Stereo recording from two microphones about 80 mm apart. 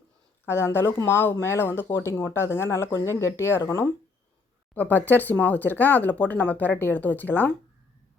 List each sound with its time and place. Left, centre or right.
0.4 s speech: left
4.7 s speech: left